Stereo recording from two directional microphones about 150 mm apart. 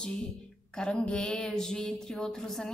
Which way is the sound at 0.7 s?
5° left (ahead or behind).